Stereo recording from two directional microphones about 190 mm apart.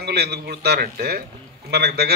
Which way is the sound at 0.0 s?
60° right (ahead or behind).